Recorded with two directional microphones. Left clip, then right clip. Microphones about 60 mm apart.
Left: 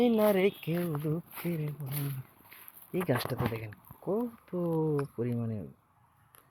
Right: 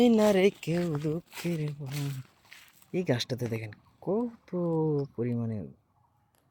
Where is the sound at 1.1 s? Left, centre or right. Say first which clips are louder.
Right 2 dB; centre.